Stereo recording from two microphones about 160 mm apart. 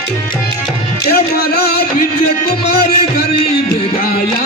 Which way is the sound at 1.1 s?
80° left.